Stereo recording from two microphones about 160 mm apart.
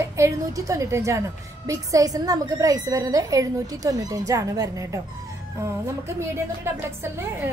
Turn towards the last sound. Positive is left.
turn(degrees=-15)  # may be behind; listen again after turning